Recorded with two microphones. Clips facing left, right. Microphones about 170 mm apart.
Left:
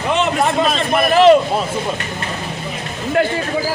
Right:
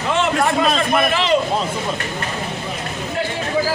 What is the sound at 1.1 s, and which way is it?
Speech, 45° left (ahead or behind).